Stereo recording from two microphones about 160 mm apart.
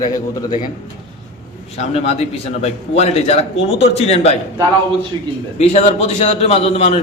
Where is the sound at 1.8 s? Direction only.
40° left (ahead or behind).